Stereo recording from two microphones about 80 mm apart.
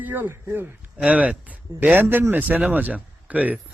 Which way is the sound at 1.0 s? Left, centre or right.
Centre.